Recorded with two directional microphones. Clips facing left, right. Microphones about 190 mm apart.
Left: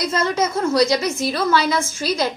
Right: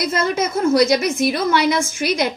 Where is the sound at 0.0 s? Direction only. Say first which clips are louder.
Even; 20° right (ahead or behind).